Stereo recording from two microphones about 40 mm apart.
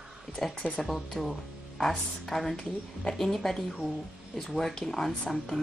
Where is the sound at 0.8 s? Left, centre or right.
Centre.